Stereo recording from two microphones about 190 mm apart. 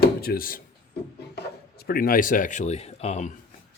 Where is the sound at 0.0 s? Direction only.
55° left (ahead or behind).